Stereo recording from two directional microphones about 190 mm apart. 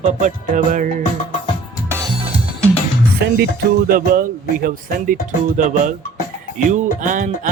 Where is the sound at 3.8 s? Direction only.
50° right (ahead or behind).